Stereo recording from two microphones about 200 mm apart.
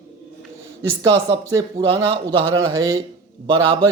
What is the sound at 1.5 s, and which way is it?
A man's voice, 15° right (ahead or behind).